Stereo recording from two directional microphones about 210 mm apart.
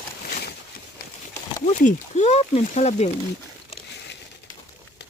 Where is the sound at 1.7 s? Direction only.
35° left (ahead or behind).